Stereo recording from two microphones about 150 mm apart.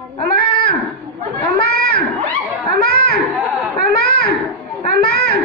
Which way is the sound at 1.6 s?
90° left.